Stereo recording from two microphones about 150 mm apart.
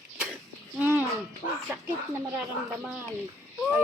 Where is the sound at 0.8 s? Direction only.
10° right (ahead or behind).